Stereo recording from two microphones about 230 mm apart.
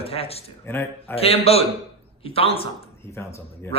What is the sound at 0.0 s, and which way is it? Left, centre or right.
Speech, left.